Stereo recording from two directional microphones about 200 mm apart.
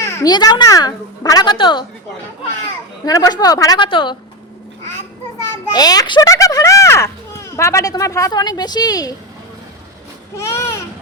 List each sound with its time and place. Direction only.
0.0 s speech: 15° left (ahead or behind)
3.0 s speech: 20° left (ahead or behind)
5.7 s speech: 20° left (ahead or behind)
10.3 s speech: 15° left (ahead or behind)